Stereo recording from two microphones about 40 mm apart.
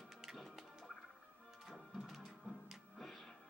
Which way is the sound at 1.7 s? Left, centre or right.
Centre.